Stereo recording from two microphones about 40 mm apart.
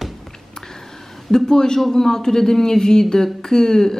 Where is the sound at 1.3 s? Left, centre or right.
Centre.